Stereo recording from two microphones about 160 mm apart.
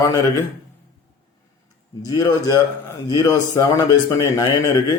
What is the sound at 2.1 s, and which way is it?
A man's voice, 20° left (ahead or behind).